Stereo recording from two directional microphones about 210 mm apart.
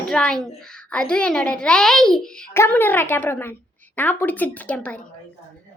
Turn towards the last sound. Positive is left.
turn(degrees=5)  # may be behind; listen again after turning